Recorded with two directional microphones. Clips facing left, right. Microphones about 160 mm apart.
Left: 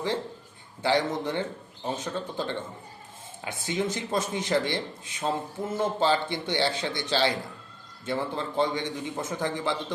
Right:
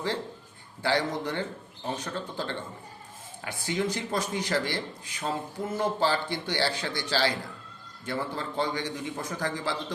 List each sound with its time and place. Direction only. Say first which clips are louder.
0.8 s speech: left 2 dB; 20° left (ahead or behind)